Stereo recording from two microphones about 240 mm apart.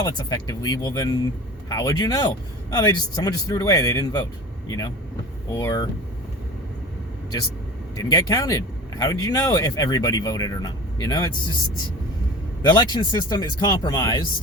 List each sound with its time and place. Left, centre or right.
0.0 s speech: centre
5.5 s speech: centre
7.9 s speech: centre
12.6 s speech: centre